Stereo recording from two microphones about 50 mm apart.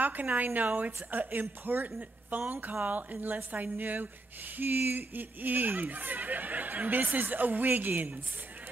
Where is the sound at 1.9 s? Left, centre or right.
Right.